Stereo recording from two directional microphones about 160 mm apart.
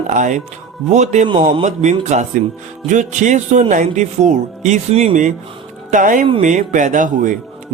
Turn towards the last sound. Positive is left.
turn(degrees=-50)  # may be behind; listen again after turning